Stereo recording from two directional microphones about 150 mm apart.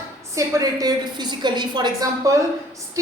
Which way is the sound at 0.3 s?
20° right (ahead or behind).